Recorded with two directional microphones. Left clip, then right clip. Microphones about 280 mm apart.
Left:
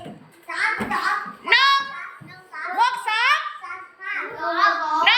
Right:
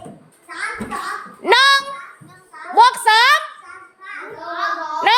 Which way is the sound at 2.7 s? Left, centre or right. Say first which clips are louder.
Right 9 dB; right.